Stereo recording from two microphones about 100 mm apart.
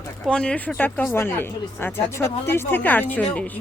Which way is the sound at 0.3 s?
10° left (ahead or behind).